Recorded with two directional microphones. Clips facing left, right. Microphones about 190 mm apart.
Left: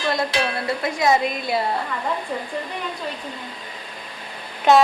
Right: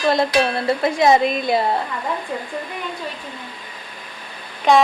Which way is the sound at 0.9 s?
25° right (ahead or behind).